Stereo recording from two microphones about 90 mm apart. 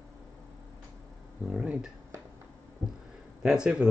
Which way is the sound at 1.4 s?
10° right (ahead or behind).